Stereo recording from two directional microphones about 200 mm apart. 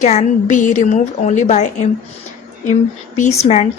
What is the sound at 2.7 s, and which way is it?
Speech, 35° left (ahead or behind).